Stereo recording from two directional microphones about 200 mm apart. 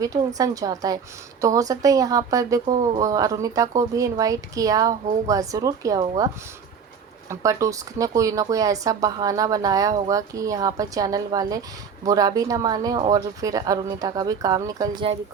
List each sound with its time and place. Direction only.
0.3 s speech: 15° right (ahead or behind)